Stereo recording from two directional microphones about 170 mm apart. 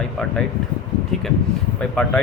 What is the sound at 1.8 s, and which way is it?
Speech, 5° left (ahead or behind).